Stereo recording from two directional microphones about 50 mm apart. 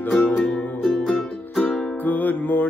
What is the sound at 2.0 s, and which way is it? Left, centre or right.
Music, left.